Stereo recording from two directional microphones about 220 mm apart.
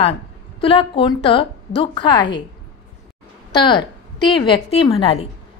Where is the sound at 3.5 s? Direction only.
20° left (ahead or behind).